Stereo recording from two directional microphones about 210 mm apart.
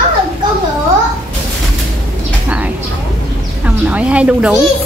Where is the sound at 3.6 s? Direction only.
5° right (ahead or behind).